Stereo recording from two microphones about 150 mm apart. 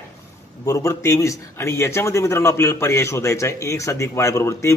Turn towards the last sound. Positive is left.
turn(degrees=20)  # may be behind; listen again after turning